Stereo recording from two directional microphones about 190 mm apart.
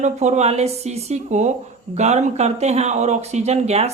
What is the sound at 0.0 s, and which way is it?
Speech, 40° right (ahead or behind).